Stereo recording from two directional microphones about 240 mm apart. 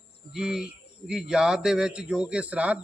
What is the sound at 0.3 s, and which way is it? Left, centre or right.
A man's voice, centre.